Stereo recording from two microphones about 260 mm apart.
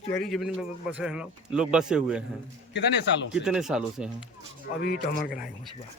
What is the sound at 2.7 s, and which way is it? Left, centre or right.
Speech, left.